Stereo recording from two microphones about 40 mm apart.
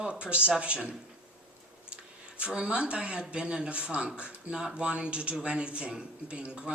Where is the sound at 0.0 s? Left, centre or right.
Right.